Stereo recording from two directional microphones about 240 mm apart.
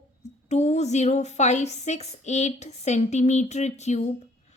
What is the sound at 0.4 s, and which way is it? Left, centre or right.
A woman's voice, left.